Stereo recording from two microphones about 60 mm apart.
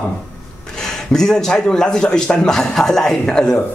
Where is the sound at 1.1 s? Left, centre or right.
Centre.